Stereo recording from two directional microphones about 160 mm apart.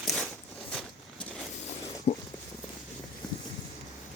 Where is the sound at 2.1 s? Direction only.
40° left (ahead or behind).